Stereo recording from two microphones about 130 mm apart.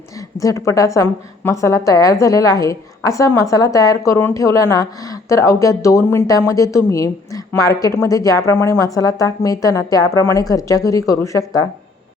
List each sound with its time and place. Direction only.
0.3 s a woman's voice: 25° left (ahead or behind)